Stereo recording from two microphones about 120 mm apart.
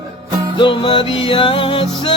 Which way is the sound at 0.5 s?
45° left (ahead or behind).